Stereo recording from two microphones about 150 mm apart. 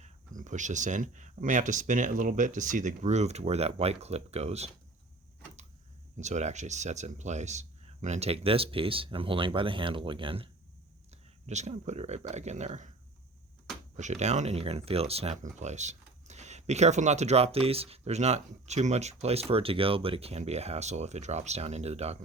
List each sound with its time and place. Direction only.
0.0 s speech: 55° right (ahead or behind)
6.1 s speech: 50° right (ahead or behind)
11.4 s speech: 50° right (ahead or behind)
13.9 s speech: 50° right (ahead or behind)